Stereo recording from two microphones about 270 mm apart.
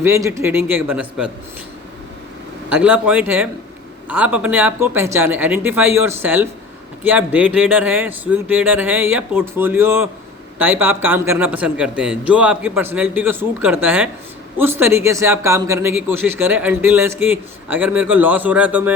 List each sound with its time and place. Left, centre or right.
0.0 s a man's voice: centre
2.6 s a man's voice: centre